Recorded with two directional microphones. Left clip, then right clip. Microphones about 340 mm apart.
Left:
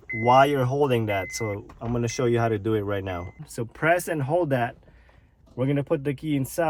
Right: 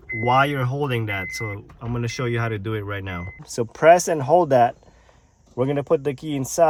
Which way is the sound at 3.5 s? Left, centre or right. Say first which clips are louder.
Right 9 dB; right.